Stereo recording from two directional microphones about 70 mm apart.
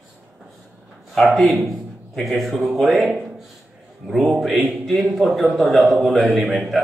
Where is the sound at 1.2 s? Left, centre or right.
Centre.